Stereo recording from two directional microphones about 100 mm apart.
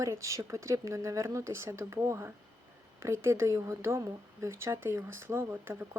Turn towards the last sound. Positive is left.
turn(degrees=-20)  # may be behind; listen again after turning